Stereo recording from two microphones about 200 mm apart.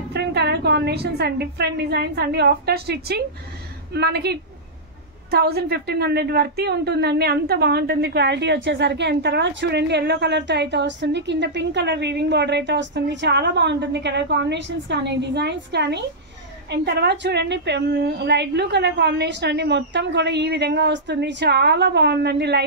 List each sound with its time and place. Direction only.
0.1 s a woman's voice: 55° right (ahead or behind)